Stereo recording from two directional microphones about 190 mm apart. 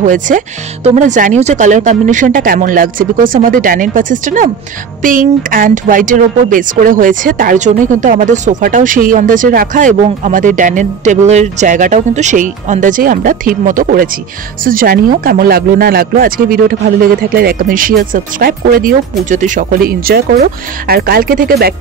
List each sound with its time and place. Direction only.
0.0 s speech: 40° right (ahead or behind)